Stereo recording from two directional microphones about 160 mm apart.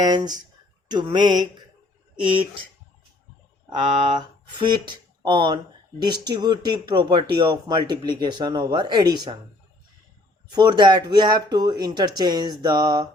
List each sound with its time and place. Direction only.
0.0 s speech: 25° right (ahead or behind)
4.5 s speech: 30° right (ahead or behind)
10.5 s speech: 25° right (ahead or behind)